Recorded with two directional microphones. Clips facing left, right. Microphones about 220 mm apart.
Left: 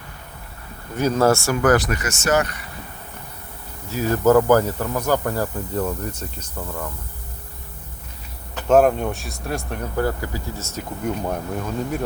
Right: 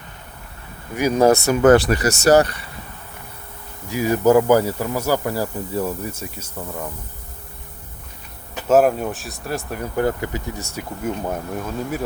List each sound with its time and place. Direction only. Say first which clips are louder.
0.9 s speech: right 2 dB; 15° right (ahead or behind); by 2.6 s 35° right (ahead or behind)
3.8 s speech: right 1 dB; 15° right (ahead or behind)
8.5 s speech: even; 5° right (ahead or behind)
9.9 s speech: right 3 dB; 20° right (ahead or behind); by 12.0 s 5° right (ahead or behind)